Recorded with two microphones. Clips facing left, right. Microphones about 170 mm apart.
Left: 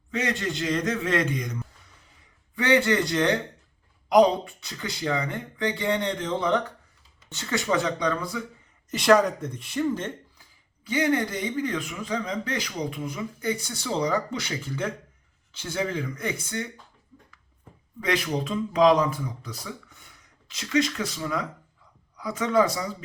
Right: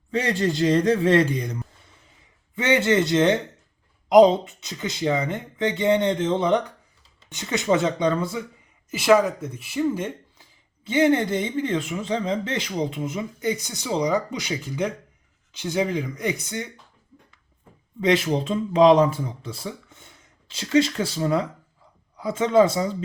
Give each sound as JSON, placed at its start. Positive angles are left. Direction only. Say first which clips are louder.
{"t": 0.1, "sound": "a man's voice", "louder": "right 5 dB", "side_deg": -30}
{"t": 2.6, "sound": "speech", "louder": "right 2 dB", "side_deg": -20}
{"t": 8.9, "sound": "speech", "louder": "right 1 dB", "side_deg": -5}
{"t": 10.8, "sound": "speech", "louder": "right 5 dB", "side_deg": -25}
{"t": 18.0, "sound": "speech", "louder": "right 6 dB", "side_deg": -25}